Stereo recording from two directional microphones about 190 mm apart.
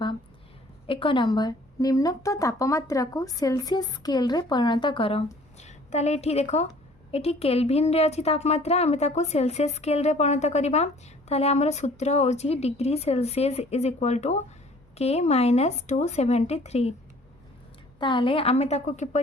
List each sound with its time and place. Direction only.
0.9 s a woman's voice: 30° left (ahead or behind)
18.0 s speech: 25° left (ahead or behind)